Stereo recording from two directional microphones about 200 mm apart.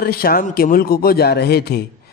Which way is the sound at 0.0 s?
50° left (ahead or behind).